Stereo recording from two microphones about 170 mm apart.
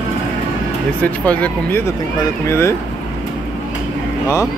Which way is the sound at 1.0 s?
10° left (ahead or behind).